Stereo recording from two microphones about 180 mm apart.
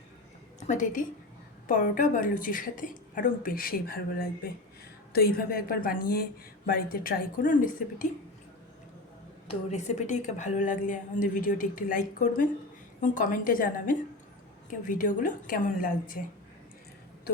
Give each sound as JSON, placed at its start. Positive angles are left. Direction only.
{"t": 0.7, "sound": "a woman's voice", "side_deg": 45}
{"t": 9.6, "sound": "a woman's voice", "side_deg": 40}